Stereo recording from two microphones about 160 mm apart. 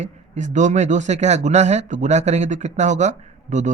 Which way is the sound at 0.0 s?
50° right (ahead or behind).